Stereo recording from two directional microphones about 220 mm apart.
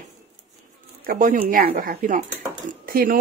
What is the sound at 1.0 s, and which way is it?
Speech, 40° right (ahead or behind).